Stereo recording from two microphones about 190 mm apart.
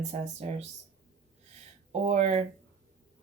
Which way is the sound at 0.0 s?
35° right (ahead or behind).